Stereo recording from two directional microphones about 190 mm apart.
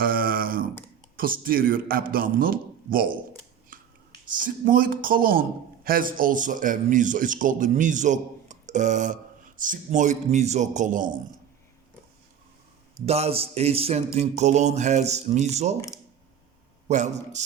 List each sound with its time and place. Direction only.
0.0 s a sound: 50° right (ahead or behind)
1.1 s a man's voice: 50° right (ahead or behind)
3.7 s finger snapping: 45° right (ahead or behind)
4.4 s a man's voice: 45° right (ahead or behind)
9.6 s mantra: 45° right (ahead or behind)
13.1 s mantra: 35° right (ahead or behind)
16.9 s mantra: 40° right (ahead or behind)